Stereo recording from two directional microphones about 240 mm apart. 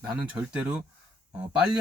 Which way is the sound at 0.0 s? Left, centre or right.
Centre.